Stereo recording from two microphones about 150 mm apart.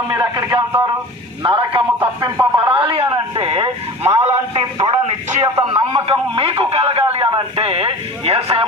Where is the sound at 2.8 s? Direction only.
40° right (ahead or behind).